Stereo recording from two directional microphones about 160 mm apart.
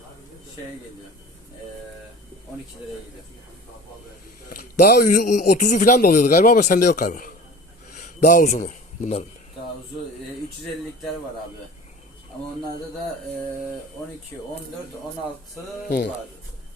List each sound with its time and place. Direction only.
4.4 s a man's voice: 70° left (ahead or behind); by 9.2 s 45° left (ahead or behind)